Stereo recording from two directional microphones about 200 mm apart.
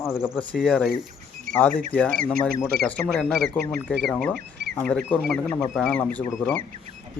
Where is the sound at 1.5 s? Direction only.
40° right (ahead or behind).